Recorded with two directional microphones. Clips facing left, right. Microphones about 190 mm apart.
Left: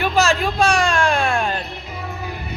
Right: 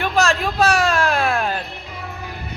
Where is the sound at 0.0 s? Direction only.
Centre (ahead or behind).